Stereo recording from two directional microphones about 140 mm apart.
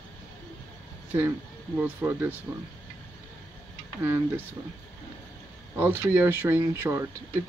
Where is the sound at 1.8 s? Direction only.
15° right (ahead or behind).